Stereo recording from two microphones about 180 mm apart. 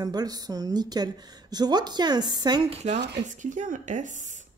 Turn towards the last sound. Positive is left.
turn(degrees=-40)  # may be behind; listen again after turning